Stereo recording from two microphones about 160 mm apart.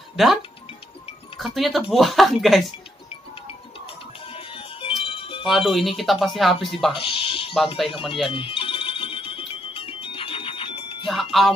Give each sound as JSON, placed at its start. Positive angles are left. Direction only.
{"t": 0.1, "sound": "speech", "side_deg": 0}
{"t": 1.4, "sound": "speech", "side_deg": 0}
{"t": 3.8, "sound": "music", "side_deg": 35}
{"t": 5.5, "sound": "speech", "side_deg": 0}
{"t": 7.0, "sound": "speech", "side_deg": 30}
{"t": 8.3, "sound": "music", "side_deg": 35}
{"t": 11.1, "sound": "speech", "side_deg": 0}